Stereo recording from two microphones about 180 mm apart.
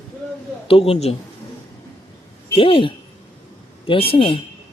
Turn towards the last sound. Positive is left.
turn(degrees=30)  # may be behind; listen again after turning